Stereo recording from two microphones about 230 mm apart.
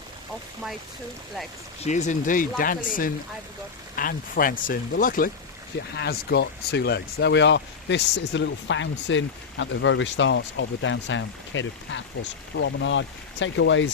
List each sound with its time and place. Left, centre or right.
1.8 s speech: left